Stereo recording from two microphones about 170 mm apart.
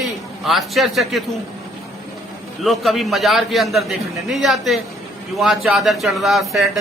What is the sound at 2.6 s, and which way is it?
A man's voice, centre (ahead or behind).